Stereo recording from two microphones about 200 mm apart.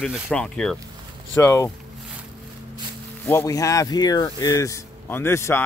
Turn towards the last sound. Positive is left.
turn(degrees=10)  # may be behind; listen again after turning